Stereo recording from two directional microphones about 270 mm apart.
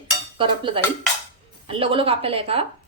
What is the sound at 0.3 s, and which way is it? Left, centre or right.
Dishes, centre.